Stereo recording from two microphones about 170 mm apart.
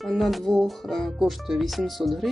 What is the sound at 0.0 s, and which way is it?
Speech, centre (ahead or behind).